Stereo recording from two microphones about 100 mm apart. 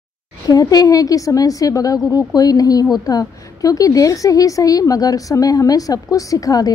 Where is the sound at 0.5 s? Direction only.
40° left (ahead or behind).